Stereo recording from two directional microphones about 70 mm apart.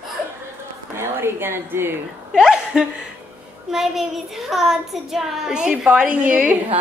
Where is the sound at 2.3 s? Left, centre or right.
Centre.